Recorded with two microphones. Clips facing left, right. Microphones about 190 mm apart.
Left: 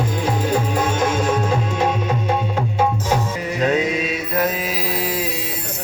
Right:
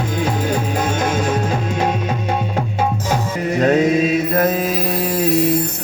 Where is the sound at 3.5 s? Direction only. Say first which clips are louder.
Right 5 dB; 50° right (ahead or behind).